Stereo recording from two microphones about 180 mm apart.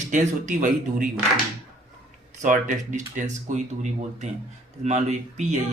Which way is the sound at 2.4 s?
45° right (ahead or behind).